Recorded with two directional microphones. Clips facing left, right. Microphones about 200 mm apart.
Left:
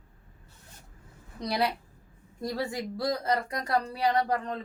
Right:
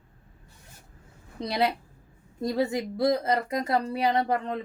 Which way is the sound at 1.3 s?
25° right (ahead or behind).